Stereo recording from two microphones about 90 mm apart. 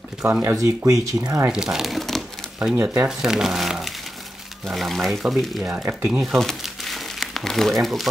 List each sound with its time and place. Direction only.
0.4 s speech: 35° right (ahead or behind)
1.5 s speech: 5° right (ahead or behind)
2.6 s speech: 15° right (ahead or behind)
5.6 s speech: 15° right (ahead or behind)
6.2 s crumpling: centre (ahead or behind)